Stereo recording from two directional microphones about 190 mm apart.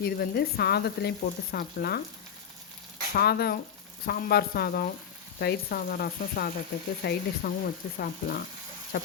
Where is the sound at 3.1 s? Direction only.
55° left (ahead or behind).